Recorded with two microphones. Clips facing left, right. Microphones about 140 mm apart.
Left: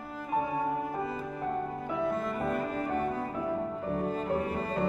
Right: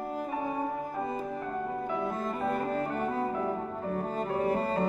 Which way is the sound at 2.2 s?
35° right (ahead or behind).